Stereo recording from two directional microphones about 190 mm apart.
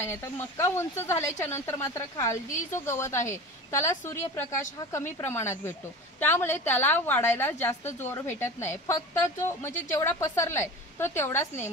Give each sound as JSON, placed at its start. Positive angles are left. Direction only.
{"t": 0.0, "sound": "a woman's voice", "side_deg": 15}